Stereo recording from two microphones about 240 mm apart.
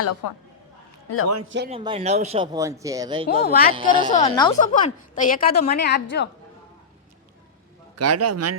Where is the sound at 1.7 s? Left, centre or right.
Right.